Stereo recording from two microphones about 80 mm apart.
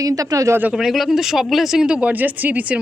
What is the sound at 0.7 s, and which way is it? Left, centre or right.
Speech, centre.